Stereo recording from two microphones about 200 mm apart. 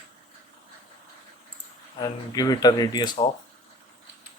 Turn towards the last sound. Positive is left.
turn(degrees=20)  # may be behind; listen again after turning